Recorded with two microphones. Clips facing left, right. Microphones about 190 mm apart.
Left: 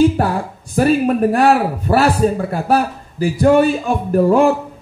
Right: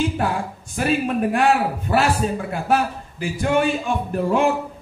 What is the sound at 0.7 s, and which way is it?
A man's voice, 40° left (ahead or behind).